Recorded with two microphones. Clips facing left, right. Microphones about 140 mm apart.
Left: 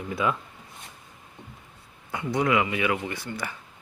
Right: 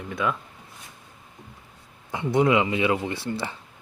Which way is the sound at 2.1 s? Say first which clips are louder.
Right 4 dB; 25° right (ahead or behind).